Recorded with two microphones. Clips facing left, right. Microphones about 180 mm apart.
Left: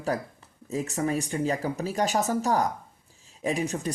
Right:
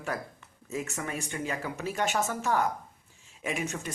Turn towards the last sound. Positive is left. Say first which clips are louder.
# left 6 dB
turn(degrees=35)  # may be behind; listen again after turning